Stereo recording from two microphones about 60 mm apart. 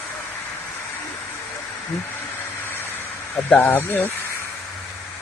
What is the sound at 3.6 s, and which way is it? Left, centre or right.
Speech, left.